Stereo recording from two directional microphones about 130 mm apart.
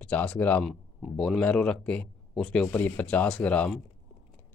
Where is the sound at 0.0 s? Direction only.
10° left (ahead or behind).